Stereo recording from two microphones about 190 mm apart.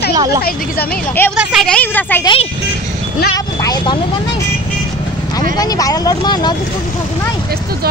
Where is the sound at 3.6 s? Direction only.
20° left (ahead or behind).